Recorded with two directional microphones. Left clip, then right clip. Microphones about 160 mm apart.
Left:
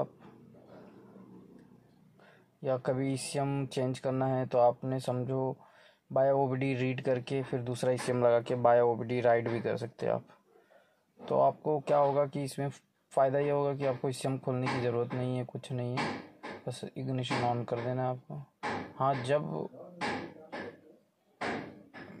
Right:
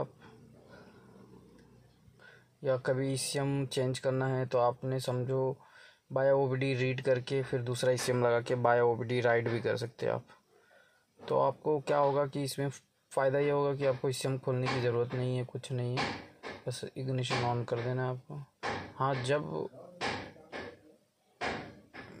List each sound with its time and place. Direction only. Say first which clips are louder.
2.6 s speech: right 1 dB; centre (ahead or behind)
11.2 s speech: left 2 dB; centre (ahead or behind)